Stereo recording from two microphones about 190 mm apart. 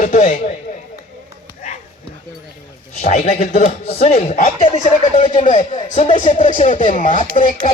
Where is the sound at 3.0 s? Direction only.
35° left (ahead or behind).